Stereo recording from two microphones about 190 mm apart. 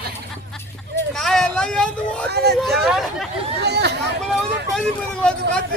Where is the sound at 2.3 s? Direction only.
60° right (ahead or behind).